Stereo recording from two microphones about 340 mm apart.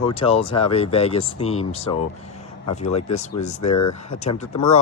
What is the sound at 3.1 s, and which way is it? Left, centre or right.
Speech, left.